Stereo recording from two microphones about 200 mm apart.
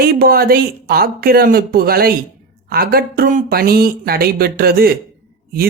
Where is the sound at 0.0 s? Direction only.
50° right (ahead or behind).